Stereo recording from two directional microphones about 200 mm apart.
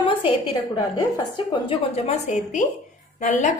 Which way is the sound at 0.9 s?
20° left (ahead or behind).